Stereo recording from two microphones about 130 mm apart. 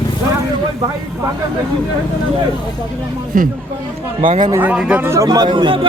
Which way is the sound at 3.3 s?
90° right.